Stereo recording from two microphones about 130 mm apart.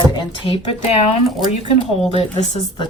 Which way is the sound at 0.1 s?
40° left (ahead or behind).